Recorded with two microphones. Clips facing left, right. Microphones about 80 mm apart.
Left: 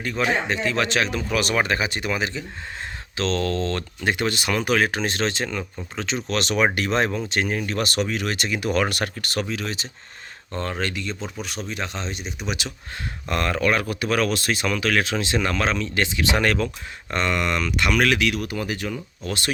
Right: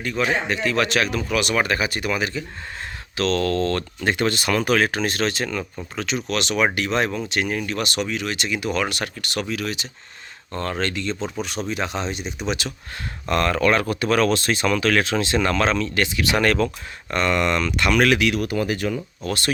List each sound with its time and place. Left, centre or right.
0.4 s speech: left
7.8 s speech: left
9.4 s speech: left
10.6 s speech: centre
11.7 s speech: centre
13.2 s speech: centre
16.0 s speech: left
17.3 s speech: centre
17.9 s speech: centre
18.4 s speech: right
19.2 s speech: centre